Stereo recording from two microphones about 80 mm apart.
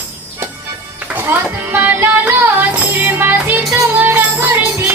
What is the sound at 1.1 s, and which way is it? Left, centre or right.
Music, right.